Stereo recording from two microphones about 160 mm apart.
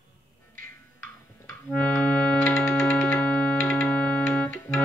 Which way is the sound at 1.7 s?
5° left (ahead or behind).